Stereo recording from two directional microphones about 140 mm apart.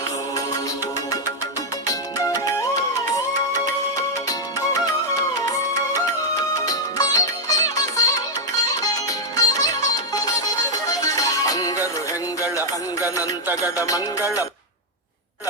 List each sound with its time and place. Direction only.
1.9 s music: 25° left (ahead or behind)
5.3 s music: 25° left (ahead or behind)
9.0 s music: 25° left (ahead or behind)